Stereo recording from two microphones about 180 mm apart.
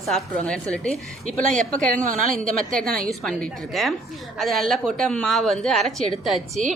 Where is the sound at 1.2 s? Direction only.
45° right (ahead or behind).